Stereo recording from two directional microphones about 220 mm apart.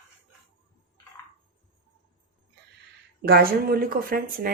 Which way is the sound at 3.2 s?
45° right (ahead or behind).